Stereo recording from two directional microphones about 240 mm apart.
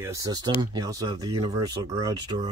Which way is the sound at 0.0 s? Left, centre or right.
Centre.